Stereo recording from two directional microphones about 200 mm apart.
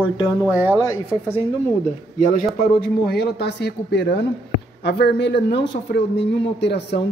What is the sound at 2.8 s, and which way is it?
Speech, 55° left (ahead or behind).